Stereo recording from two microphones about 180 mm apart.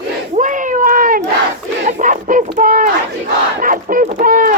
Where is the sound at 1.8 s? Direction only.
45° right (ahead or behind).